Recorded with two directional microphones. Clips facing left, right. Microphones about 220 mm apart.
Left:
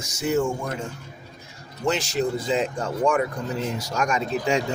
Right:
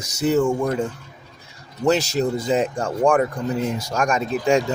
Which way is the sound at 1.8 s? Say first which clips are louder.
Right 5 dB; 40° right (ahead or behind).